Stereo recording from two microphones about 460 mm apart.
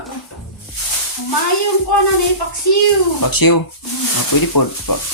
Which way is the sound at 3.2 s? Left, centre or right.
Left.